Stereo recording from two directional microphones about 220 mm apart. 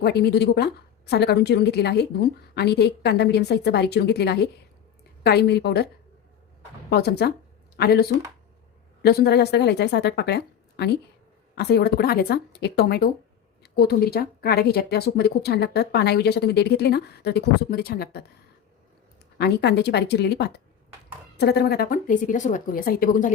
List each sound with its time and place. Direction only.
0.0 s speech: 50° left (ahead or behind)
6.9 s speech: 45° left (ahead or behind)
19.4 s speech: 50° left (ahead or behind)